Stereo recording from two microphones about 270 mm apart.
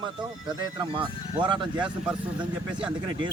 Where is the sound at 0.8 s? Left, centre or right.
Centre.